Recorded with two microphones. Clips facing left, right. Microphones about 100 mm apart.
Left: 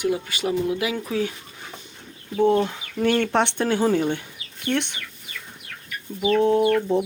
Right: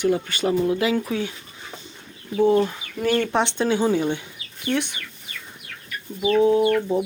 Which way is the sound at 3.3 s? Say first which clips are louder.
Even; 60° left (ahead or behind).